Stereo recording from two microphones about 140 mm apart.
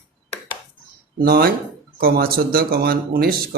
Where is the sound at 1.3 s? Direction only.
90° right.